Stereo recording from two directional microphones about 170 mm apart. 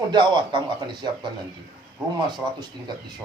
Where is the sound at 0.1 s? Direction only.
25° right (ahead or behind).